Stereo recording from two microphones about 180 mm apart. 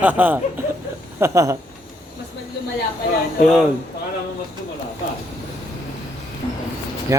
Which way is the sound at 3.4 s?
Centre (ahead or behind).